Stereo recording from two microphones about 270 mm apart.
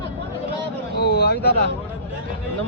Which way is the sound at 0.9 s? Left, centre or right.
Left.